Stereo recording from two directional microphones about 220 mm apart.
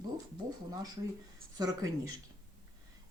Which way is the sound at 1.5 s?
15° right (ahead or behind).